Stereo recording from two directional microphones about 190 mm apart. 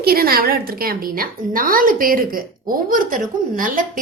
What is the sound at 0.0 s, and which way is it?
Speech, 50° right (ahead or behind).